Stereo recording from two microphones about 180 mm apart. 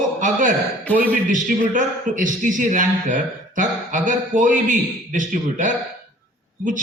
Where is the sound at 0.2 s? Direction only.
45° right (ahead or behind).